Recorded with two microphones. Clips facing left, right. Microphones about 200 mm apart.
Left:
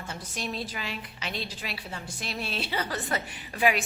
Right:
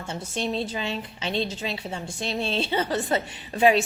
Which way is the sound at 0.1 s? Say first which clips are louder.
Right 8 dB; 25° right (ahead or behind).